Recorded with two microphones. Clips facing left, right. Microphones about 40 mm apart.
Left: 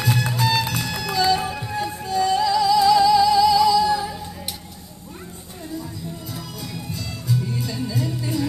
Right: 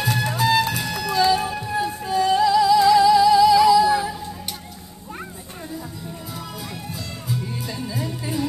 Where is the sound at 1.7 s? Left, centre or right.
Centre.